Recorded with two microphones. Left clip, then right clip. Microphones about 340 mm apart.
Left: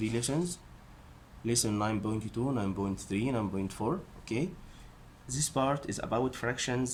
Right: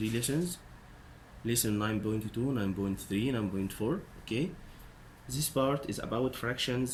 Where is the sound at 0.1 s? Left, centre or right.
Centre.